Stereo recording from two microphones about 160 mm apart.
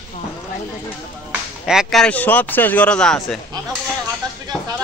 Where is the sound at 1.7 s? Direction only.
Centre (ahead or behind).